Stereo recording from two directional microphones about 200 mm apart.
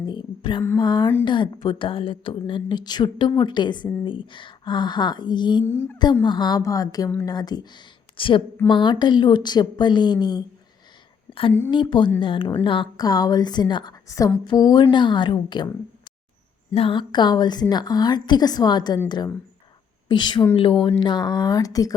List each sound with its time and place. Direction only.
0.0 s a sound: 20° left (ahead or behind)
0.8 s a woman's voice: 20° left (ahead or behind)
5.6 s a woman's voice: 10° left (ahead or behind)
11.7 s a woman's voice: 25° left (ahead or behind)
16.7 s a woman's voice: 25° left (ahead or behind)